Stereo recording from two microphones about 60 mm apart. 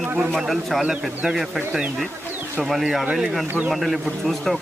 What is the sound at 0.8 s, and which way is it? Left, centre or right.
Speech, centre.